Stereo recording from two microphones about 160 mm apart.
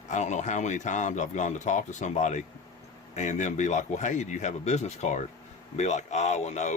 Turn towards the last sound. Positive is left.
turn(degrees=45)  # may be behind; listen again after turning